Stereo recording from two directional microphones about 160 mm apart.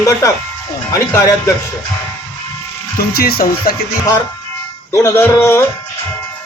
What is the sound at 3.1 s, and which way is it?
Speech, 75° left (ahead or behind).